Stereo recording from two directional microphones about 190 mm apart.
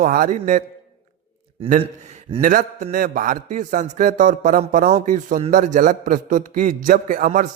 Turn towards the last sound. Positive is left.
turn(degrees=-45)  # may be behind; listen again after turning